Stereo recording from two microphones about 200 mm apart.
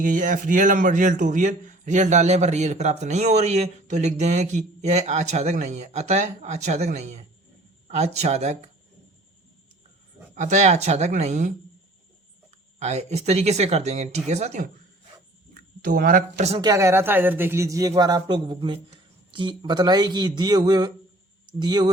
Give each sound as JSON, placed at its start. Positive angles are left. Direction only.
{"t": 0.0, "sound": "speech", "side_deg": -40}
{"t": 10.3, "sound": "speech", "side_deg": -35}
{"t": 12.8, "sound": "speech", "side_deg": -35}
{"t": 15.8, "sound": "speech", "side_deg": -45}
{"t": 16.6, "sound": "speech", "side_deg": -15}